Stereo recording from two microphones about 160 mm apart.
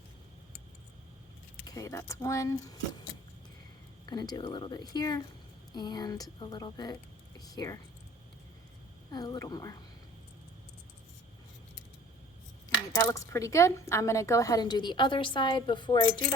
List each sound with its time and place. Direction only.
1.6 s a woman's voice: 20° left (ahead or behind)
4.1 s a woman's voice: 25° left (ahead or behind)
9.0 s a woman's voice: 25° left (ahead or behind)
13.0 s a woman's voice: 20° left (ahead or behind)